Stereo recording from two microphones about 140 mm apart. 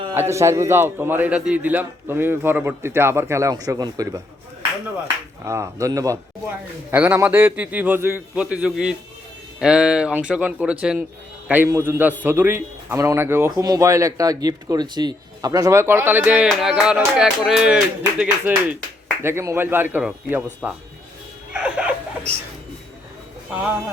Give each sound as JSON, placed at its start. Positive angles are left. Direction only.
{"t": 0.1, "sound": "speech", "side_deg": -20}
{"t": 5.5, "sound": "speech", "side_deg": -20}
{"t": 6.9, "sound": "speech", "side_deg": -15}
{"t": 19.2, "sound": "speech", "side_deg": -20}
{"t": 21.5, "sound": "a sound", "side_deg": -10}